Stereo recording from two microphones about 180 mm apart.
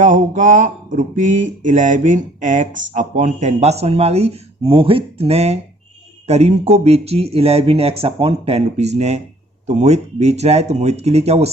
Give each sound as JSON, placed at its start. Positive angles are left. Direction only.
{"t": 0.0, "sound": "speech", "side_deg": -45}